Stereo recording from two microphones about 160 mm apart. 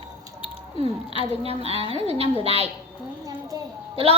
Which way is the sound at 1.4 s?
40° right (ahead or behind).